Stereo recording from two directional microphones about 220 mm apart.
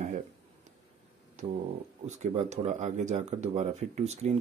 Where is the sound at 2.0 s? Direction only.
30° right (ahead or behind).